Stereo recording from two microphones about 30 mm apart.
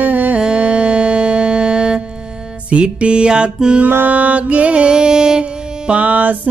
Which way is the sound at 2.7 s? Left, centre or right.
Right.